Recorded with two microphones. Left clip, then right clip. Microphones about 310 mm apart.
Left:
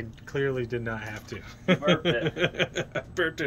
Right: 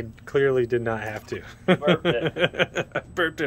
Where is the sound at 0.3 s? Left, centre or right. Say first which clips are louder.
Right 8 dB; centre.